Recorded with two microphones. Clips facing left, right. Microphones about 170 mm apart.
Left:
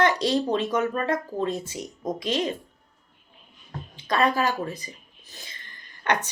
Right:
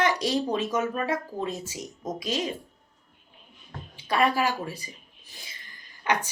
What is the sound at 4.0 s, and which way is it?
Speech, 10° right (ahead or behind).